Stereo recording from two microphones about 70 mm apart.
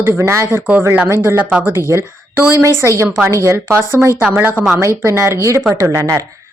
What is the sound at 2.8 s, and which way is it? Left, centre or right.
A woman's voice, right.